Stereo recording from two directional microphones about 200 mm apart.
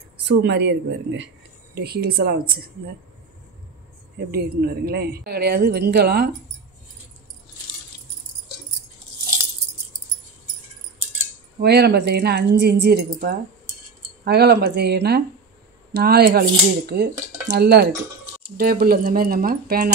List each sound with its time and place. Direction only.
0.2 s speech: 60° right (ahead or behind)
4.3 s speech: 50° right (ahead or behind)
11.6 s speech: 55° right (ahead or behind)